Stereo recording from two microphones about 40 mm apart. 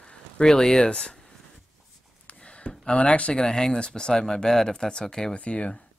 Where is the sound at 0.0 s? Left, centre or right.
Centre.